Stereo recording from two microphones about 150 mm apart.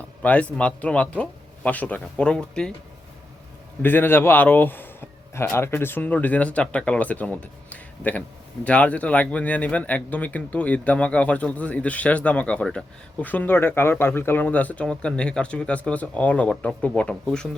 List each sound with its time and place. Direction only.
0.2 s a man's voice: 10° left (ahead or behind)
3.8 s a man's voice: 15° left (ahead or behind)